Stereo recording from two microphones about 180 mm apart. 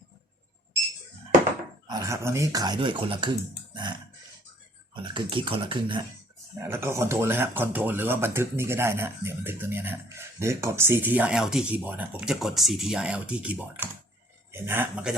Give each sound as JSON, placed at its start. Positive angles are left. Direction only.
{"t": 1.9, "sound": "speech", "side_deg": -20}
{"t": 5.1, "sound": "speech", "side_deg": -30}
{"t": 6.6, "sound": "speech", "side_deg": -15}